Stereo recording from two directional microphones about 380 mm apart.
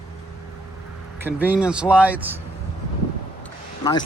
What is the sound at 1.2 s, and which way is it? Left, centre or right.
Speech, centre.